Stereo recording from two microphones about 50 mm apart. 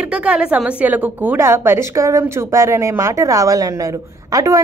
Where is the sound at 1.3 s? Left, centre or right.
Right.